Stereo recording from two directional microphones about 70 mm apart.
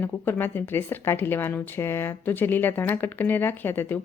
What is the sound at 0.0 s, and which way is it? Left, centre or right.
Speech, left.